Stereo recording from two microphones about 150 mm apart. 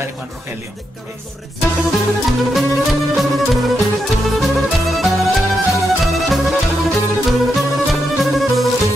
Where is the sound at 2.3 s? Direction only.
Centre (ahead or behind).